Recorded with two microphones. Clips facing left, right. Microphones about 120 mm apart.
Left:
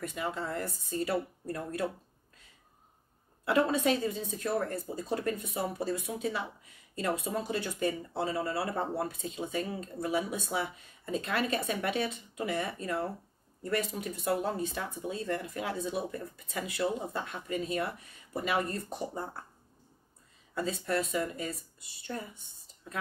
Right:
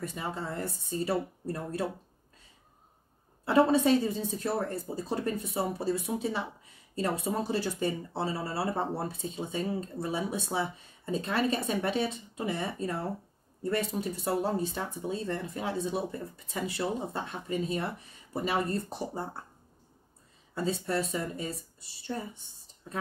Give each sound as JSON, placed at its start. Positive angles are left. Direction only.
{"t": 0.2, "sound": "speech", "side_deg": -30}
{"t": 3.4, "sound": "speech", "side_deg": -30}
{"t": 20.5, "sound": "speech", "side_deg": -30}